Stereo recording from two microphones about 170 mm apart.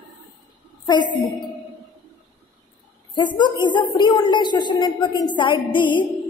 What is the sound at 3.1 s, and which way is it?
A woman's voice, 25° left (ahead or behind).